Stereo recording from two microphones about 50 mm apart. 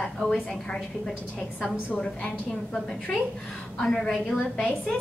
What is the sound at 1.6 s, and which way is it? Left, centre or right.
Speech, left.